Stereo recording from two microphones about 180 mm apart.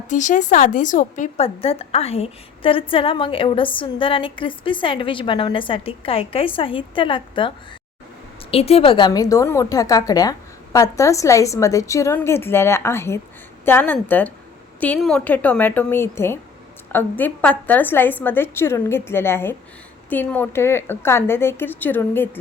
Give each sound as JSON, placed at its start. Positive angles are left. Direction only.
{"t": 0.1, "sound": "a woman's voice", "side_deg": 45}